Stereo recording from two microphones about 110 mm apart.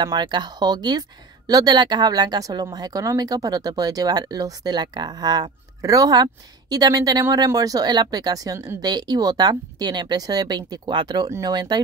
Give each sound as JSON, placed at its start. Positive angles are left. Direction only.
{"t": 0.0, "sound": "speech", "side_deg": -40}
{"t": 11.2, "sound": "speech", "side_deg": -30}